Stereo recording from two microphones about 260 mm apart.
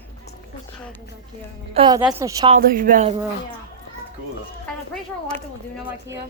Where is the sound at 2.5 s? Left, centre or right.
Right.